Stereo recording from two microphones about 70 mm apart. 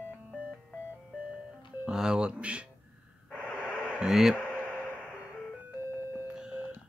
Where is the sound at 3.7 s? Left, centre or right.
Left.